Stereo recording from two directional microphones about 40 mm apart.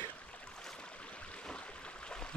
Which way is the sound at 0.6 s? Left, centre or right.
Centre.